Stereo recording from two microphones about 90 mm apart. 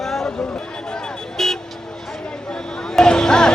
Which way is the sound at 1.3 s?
5° left (ahead or behind).